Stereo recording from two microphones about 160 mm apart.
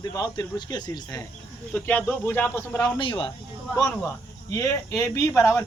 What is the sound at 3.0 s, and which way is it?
Speech, 30° left (ahead or behind).